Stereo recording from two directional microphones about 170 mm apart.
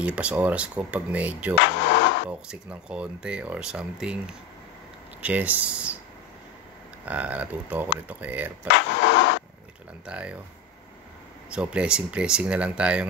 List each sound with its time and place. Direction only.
0.0 s speech: 5° right (ahead or behind)
1.6 s a sound: 90° left
2.4 s speech: 5° right (ahead or behind)
7.1 s speech: 10° right (ahead or behind)
8.7 s a sound: 90° left
10.0 s speech: 5° right (ahead or behind)
11.5 s speech: 5° right (ahead or behind)